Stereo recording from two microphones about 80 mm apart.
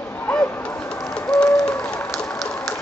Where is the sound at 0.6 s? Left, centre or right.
Centre.